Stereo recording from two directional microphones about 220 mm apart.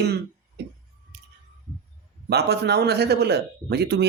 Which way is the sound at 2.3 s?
50° right (ahead or behind).